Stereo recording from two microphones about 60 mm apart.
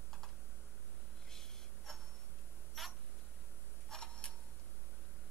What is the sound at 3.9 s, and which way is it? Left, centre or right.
Tick-tock, centre.